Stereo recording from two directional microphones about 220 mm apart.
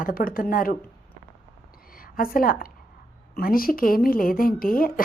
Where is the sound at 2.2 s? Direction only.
40° left (ahead or behind).